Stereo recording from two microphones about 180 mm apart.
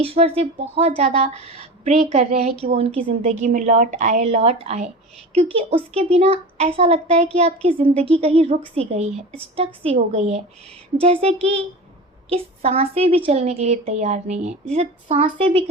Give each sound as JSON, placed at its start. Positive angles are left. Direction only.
{"t": 0.0, "sound": "speech", "side_deg": -35}
{"t": 3.4, "sound": "speech", "side_deg": -45}